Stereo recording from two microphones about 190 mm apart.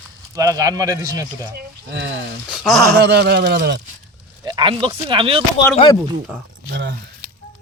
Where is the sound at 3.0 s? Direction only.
60° right (ahead or behind).